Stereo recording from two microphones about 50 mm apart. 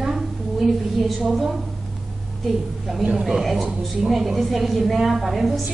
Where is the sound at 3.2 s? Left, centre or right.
Centre.